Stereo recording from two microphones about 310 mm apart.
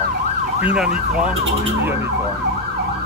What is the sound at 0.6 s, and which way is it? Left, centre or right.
Ambulance, centre.